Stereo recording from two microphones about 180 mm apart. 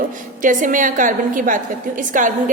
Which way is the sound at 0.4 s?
45° right (ahead or behind).